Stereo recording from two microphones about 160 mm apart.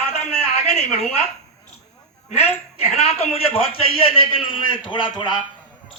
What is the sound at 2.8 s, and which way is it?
A man's voice, 40° left (ahead or behind).